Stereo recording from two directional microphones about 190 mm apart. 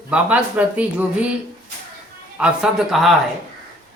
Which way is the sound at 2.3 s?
5° right (ahead or behind).